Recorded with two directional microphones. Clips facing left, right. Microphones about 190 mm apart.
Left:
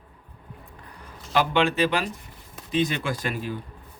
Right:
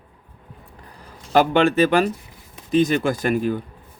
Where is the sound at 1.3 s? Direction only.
45° right (ahead or behind).